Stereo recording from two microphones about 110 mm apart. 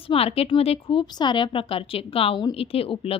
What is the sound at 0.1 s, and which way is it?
Speech, 65° left (ahead or behind).